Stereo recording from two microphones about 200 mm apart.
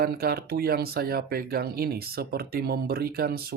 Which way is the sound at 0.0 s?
50° right (ahead or behind).